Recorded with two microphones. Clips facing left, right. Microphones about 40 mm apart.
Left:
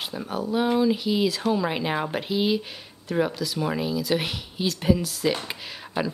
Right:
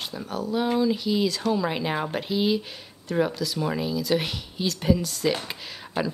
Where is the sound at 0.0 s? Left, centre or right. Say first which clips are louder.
Left 1 dB; centre.